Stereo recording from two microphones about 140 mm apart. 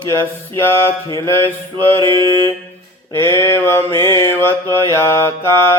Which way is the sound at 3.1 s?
20° left (ahead or behind).